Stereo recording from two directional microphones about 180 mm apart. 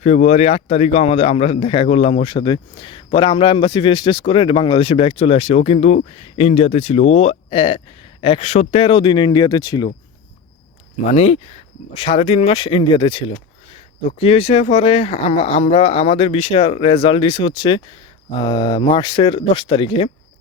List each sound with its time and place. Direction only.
0.0 s a man's voice: 40° left (ahead or behind); by 9.9 s 25° left (ahead or behind)
11.0 s a man's voice: 40° left (ahead or behind)